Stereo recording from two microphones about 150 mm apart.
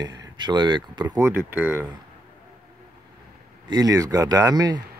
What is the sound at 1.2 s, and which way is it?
Speech, 15° right (ahead or behind).